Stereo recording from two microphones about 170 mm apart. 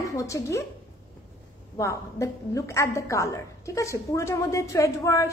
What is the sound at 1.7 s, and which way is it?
A woman's voice, 20° left (ahead or behind).